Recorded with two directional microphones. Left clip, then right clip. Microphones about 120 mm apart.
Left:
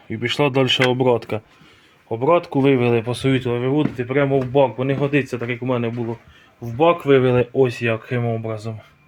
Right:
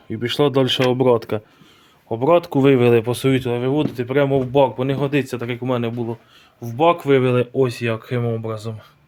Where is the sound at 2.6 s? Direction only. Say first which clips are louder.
Right 3 dB; 40° right (ahead or behind).